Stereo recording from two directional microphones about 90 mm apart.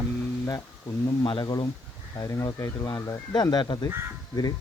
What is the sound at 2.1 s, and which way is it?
Speech, 40° left (ahead or behind).